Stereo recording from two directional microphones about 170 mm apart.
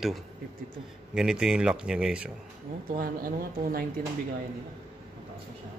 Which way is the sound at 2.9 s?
55° right (ahead or behind).